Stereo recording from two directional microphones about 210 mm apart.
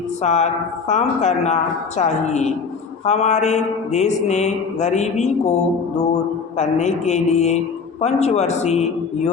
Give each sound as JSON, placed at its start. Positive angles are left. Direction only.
{"t": 0.2, "sound": "mantra", "side_deg": 35}
{"t": 6.6, "sound": "mantra", "side_deg": 35}